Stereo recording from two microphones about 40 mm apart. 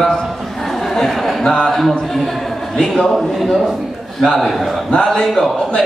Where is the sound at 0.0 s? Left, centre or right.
Centre.